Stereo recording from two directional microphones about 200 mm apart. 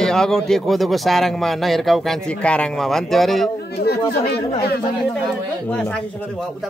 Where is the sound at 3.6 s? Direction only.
55° left (ahead or behind).